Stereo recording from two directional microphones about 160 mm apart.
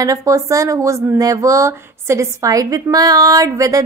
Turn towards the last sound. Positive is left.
turn(degrees=-20)  # may be behind; listen again after turning